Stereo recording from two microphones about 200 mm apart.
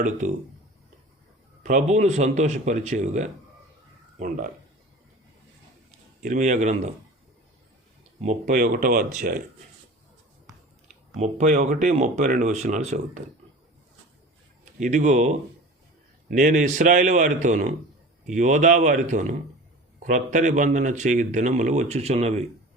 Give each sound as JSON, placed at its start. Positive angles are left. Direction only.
{"t": 1.6, "sound": "speech", "side_deg": -35}
{"t": 6.2, "sound": "speech", "side_deg": -40}
{"t": 8.2, "sound": "speech", "side_deg": -35}
{"t": 11.2, "sound": "speech", "side_deg": -35}
{"t": 14.6, "sound": "speech", "side_deg": -35}